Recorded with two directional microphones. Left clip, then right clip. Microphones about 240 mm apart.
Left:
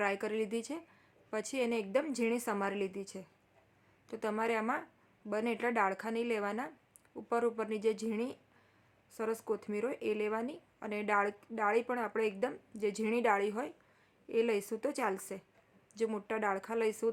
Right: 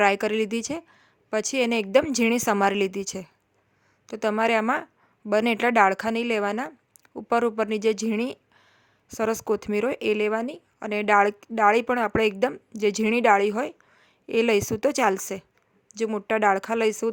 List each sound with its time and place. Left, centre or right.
0.0 s speech: right